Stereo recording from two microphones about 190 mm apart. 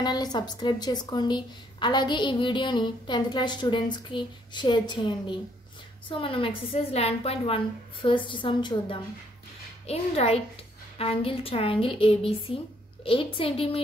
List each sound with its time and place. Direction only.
0.0 s a woman's voice: 20° left (ahead or behind)